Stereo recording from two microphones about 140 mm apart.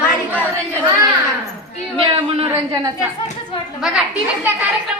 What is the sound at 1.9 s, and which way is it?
Speech, 40° right (ahead or behind).